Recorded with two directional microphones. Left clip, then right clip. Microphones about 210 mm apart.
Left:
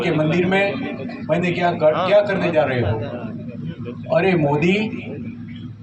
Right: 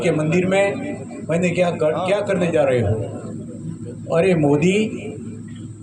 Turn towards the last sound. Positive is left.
turn(degrees=-55)  # may be behind; listen again after turning